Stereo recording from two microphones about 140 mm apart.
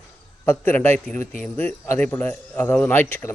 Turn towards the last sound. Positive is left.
turn(degrees=15)  # may be behind; listen again after turning